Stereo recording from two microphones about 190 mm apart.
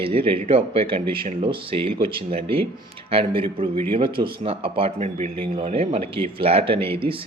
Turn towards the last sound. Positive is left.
turn(degrees=-30)  # may be behind; listen again after turning